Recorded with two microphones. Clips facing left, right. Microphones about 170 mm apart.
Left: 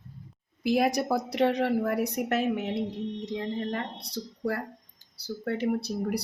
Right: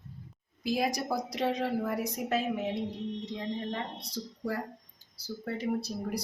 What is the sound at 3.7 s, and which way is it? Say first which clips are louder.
A woman's voice: left 3 dB; 65° left (ahead or behind).